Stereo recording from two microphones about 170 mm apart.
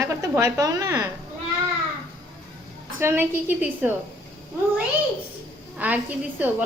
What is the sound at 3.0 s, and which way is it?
Speech, 15° right (ahead or behind).